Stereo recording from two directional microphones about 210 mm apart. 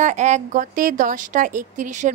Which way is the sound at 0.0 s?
35° right (ahead or behind).